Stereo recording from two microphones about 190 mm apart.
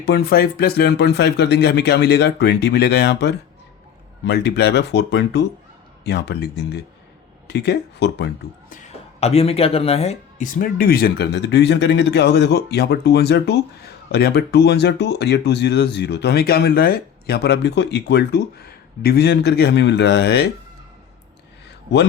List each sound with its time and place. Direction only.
0.0 s speech: 55° left (ahead or behind)
8.7 s speech: 35° left (ahead or behind); by 20.5 s 60° left (ahead or behind)